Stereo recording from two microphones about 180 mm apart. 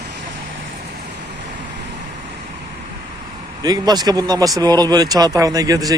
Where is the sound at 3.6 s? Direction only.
20° right (ahead or behind).